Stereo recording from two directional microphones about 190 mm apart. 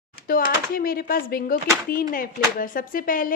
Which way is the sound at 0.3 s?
50° left (ahead or behind).